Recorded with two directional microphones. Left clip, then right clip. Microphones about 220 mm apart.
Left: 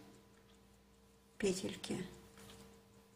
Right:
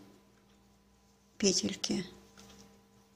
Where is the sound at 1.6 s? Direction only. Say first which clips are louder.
Right 8 dB; 45° right (ahead or behind).